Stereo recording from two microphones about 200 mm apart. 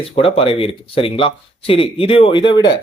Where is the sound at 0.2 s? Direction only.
30° left (ahead or behind).